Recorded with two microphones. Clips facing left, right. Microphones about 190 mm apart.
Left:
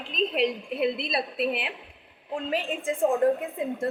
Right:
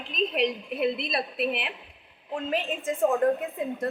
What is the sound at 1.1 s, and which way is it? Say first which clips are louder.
Speech: left 1 dB; 30° left (ahead or behind).